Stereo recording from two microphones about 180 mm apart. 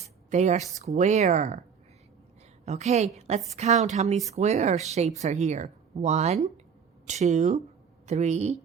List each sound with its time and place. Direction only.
0.0 s a sound: 40° right (ahead or behind)
0.8 s speech: 40° right (ahead or behind)
2.6 s speech: 40° right (ahead or behind)